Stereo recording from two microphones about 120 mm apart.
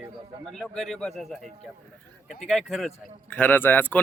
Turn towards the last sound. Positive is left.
turn(degrees=15)  # may be behind; listen again after turning